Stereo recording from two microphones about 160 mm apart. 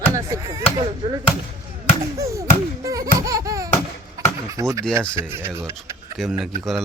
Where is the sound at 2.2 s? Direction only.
20° right (ahead or behind).